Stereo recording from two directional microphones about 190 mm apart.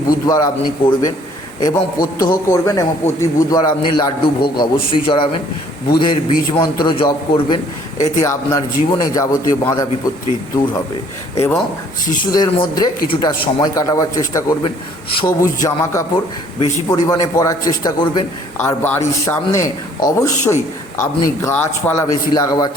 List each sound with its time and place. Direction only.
0.1 s a man's voice: 20° left (ahead or behind)
7.9 s a man's voice: 40° left (ahead or behind)
8.2 s a man's voice: 15° left (ahead or behind)
11.3 s a man's voice: 15° left (ahead or behind)